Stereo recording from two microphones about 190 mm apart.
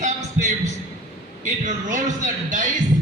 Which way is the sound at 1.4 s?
40° right (ahead or behind).